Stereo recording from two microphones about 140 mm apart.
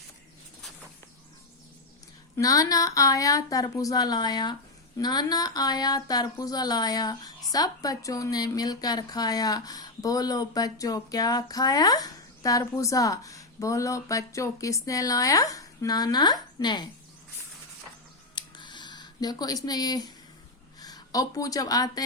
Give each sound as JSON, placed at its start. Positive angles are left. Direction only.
{"t": 2.4, "sound": "speech", "side_deg": 25}
{"t": 18.3, "sound": "a sound", "side_deg": 35}
{"t": 20.8, "sound": "a woman's voice", "side_deg": 25}